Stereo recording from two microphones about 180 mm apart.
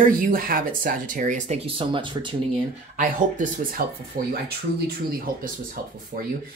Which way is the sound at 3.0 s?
45° right (ahead or behind).